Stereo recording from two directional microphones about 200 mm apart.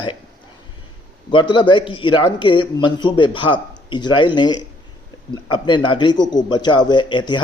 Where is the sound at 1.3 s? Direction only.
25° left (ahead or behind).